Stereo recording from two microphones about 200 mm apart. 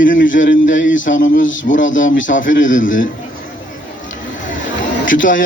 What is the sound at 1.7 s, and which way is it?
Speech, 70° left (ahead or behind).